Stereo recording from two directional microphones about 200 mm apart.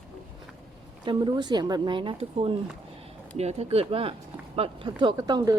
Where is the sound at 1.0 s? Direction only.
20° right (ahead or behind).